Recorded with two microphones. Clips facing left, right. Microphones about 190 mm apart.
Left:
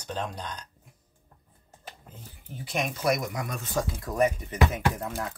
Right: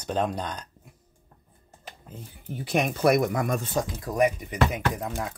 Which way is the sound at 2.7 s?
60° right (ahead or behind).